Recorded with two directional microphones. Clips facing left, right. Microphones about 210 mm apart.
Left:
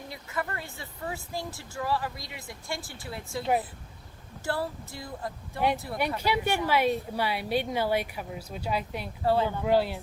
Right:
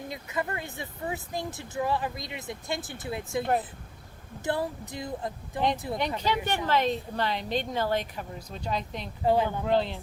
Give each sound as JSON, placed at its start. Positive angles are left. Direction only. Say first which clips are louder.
{"t": 0.1, "sound": "speech", "louder": "right 2 dB", "side_deg": -20}
{"t": 4.4, "sound": "speech", "louder": "right 2 dB", "side_deg": -20}
{"t": 6.1, "sound": "a woman's voice", "louder": "left 1 dB", "side_deg": 10}
{"t": 9.2, "sound": "speech", "louder": "right 1 dB", "side_deg": -15}
{"t": 9.5, "sound": "a woman's voice", "louder": "left 1 dB", "side_deg": 10}